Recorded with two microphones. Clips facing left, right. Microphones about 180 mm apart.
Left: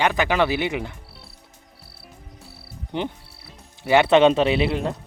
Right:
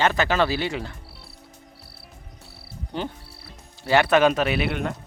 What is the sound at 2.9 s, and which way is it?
Speech, 20° left (ahead or behind).